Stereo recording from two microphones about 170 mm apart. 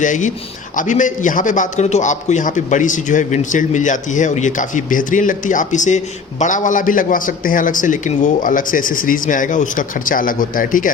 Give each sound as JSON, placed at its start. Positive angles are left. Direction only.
{"t": 0.0, "sound": "a man's voice", "side_deg": 45}